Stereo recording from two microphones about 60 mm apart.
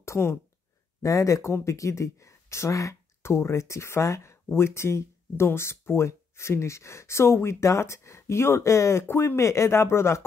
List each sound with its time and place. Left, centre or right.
0.0 s speech: left
1.0 s speech: left
3.2 s speech: left